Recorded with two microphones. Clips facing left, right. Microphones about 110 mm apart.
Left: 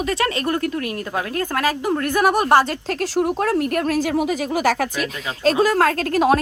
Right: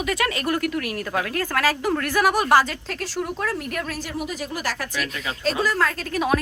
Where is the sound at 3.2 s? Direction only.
50° left (ahead or behind).